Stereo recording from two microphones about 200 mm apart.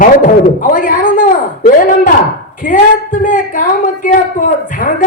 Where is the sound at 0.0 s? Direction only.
40° left (ahead or behind).